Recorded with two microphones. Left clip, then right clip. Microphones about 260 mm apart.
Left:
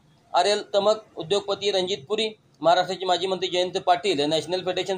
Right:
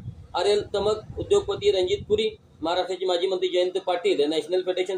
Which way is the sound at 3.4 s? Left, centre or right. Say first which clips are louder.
Right 1 dB; left.